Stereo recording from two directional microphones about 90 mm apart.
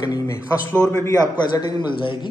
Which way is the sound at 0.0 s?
45° left (ahead or behind).